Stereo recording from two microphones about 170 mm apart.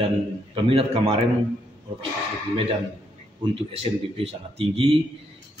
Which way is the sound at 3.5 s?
35° right (ahead or behind).